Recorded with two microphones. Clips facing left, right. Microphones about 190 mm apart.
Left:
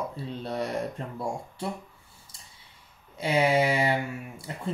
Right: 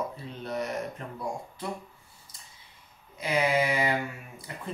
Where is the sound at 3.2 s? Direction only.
30° left (ahead or behind).